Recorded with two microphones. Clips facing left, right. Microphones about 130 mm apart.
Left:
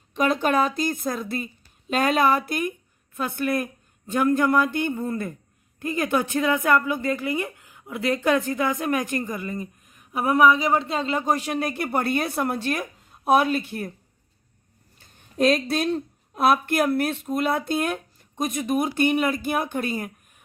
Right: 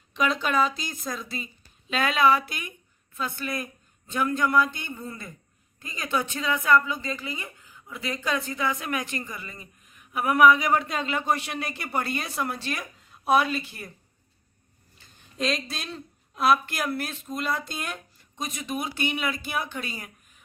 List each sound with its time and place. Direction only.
0.1 s a woman's voice: 50° left (ahead or behind)
1.9 s a woman's voice: 45° left (ahead or behind)
14.9 s speech: 55° left (ahead or behind)